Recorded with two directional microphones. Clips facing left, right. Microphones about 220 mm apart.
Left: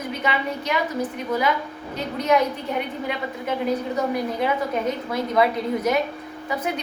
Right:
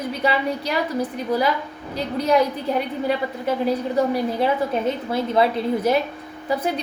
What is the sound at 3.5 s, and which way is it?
A woman's voice, 30° right (ahead or behind).